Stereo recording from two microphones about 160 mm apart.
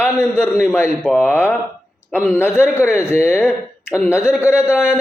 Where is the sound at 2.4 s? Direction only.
15° left (ahead or behind).